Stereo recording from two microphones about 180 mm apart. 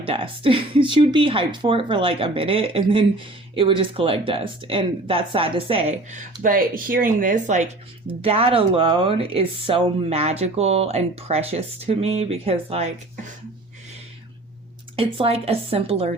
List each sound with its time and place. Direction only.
0.0 s speech: 30° right (ahead or behind)
6.4 s speech: 50° right (ahead or behind)
8.0 s speech: 30° right (ahead or behind)
14.9 s speech: 30° right (ahead or behind)